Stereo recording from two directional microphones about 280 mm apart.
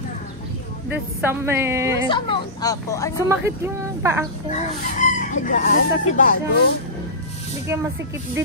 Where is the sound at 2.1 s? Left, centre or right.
Centre.